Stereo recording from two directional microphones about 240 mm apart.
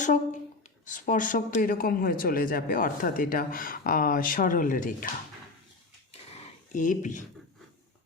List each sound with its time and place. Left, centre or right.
0.0 s a man's voice: left
6.7 s a man's voice: left